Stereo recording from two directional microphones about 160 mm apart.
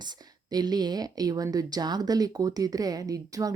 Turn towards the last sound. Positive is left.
turn(degrees=-20)  # may be behind; listen again after turning